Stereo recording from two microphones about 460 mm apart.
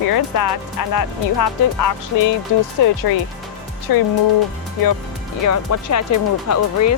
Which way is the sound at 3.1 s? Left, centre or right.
Left.